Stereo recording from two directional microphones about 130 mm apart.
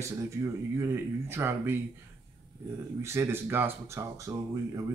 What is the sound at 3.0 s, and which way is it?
Speech, 20° right (ahead or behind).